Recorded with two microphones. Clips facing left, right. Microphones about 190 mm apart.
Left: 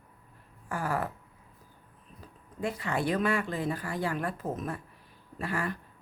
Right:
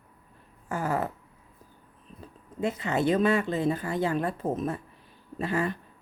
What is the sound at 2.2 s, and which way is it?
Speech, 20° right (ahead or behind).